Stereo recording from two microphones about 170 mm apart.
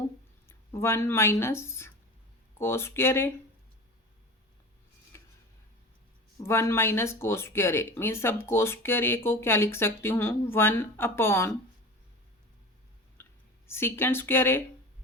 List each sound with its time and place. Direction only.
0.4 s speech: 15° left (ahead or behind)
5.1 s a sound: 15° left (ahead or behind)
6.4 s speech: 15° left (ahead or behind)
13.7 s speech: 15° left (ahead or behind)